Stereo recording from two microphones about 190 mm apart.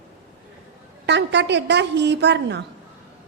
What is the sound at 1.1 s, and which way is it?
A woman's voice, 65° right (ahead or behind).